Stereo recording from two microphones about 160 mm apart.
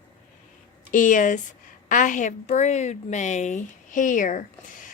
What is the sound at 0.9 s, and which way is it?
Speech, 55° left (ahead or behind).